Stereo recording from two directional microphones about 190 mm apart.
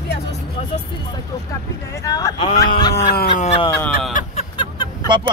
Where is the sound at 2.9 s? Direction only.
55° left (ahead or behind).